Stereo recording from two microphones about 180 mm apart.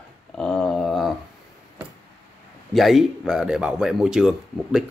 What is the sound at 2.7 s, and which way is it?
Speech, centre (ahead or behind).